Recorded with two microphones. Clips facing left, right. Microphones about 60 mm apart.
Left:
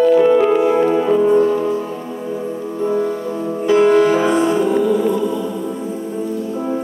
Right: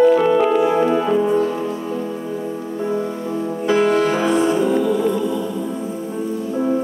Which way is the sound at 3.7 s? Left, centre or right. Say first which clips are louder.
Left 5 dB; centre.